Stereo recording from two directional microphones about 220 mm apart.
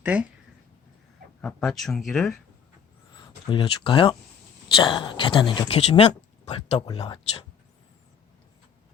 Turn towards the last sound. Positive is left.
turn(degrees=25)  # may be behind; listen again after turning